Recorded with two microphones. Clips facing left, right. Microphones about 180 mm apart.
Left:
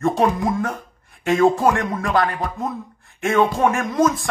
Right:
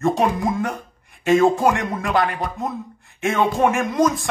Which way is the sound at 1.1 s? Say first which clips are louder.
Right 1 dB; 20° right (ahead or behind).